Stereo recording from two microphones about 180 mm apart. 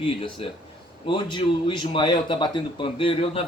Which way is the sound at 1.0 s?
30° left (ahead or behind).